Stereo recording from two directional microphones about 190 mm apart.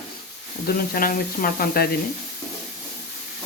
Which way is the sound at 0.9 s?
50° left (ahead or behind).